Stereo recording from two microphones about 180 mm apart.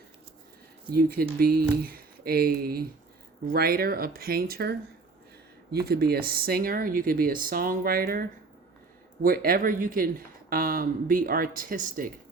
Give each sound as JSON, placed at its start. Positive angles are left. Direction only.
{"t": 0.9, "sound": "speech", "side_deg": -55}
{"t": 9.2, "sound": "speech", "side_deg": -55}